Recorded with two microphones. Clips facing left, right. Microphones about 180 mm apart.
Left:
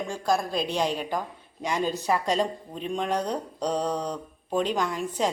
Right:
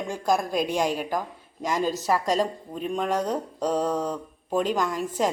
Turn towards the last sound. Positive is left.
turn(degrees=0)  # may be behind; listen again after turning